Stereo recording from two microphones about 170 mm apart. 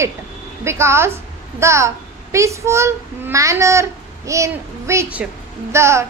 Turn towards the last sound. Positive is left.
turn(degrees=-15)  # may be behind; listen again after turning